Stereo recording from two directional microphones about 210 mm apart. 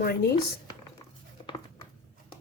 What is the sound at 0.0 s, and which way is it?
Speech, 45° left (ahead or behind).